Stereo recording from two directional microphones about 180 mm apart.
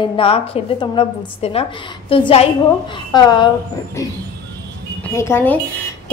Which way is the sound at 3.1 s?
25° left (ahead or behind).